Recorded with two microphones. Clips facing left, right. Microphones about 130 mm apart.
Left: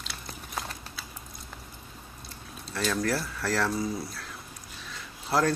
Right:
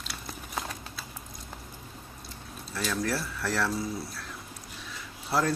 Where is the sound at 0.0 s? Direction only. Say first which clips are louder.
Right 1 dB; centre (ahead or behind).